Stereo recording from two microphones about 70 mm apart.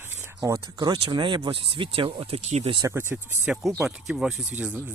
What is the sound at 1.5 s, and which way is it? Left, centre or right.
Speech, right.